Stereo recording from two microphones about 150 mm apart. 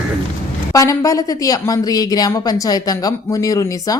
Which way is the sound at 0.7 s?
20° left (ahead or behind).